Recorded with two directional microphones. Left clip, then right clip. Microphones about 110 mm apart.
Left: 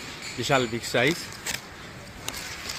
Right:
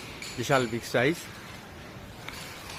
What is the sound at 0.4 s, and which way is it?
Speech, 15° left (ahead or behind).